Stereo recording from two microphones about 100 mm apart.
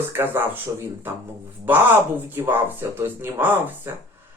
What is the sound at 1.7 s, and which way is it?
Speech, 20° right (ahead or behind).